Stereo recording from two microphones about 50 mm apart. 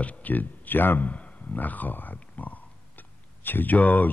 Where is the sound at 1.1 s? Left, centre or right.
Left.